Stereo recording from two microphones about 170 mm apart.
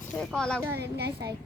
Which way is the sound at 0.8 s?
75° right (ahead or behind).